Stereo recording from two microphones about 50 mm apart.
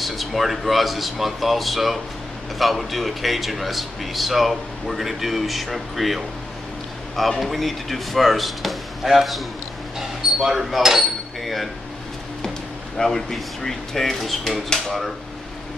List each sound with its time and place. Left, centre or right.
0.0 s speech: centre
9.9 s a sound: centre
12.9 s speech: centre